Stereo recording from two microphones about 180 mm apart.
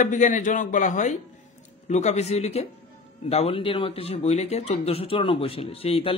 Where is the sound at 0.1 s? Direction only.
45° left (ahead or behind).